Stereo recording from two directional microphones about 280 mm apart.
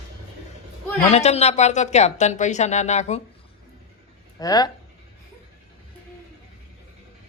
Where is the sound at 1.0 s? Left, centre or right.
Left.